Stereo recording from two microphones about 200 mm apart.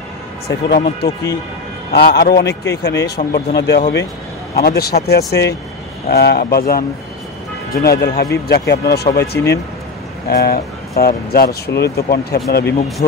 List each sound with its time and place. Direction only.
0.7 s speech: 50° left (ahead or behind)